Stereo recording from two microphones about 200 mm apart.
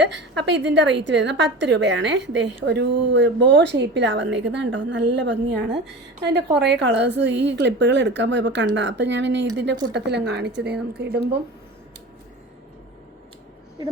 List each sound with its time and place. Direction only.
0.5 s a woman's voice: 60° right (ahead or behind)